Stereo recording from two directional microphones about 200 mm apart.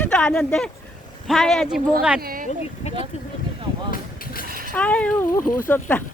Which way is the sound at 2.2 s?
45° right (ahead or behind).